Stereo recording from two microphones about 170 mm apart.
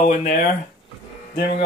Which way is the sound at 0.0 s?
50° left (ahead or behind).